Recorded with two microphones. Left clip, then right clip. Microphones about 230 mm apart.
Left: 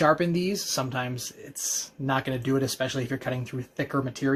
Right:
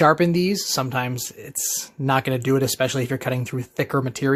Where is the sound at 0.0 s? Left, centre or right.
Right.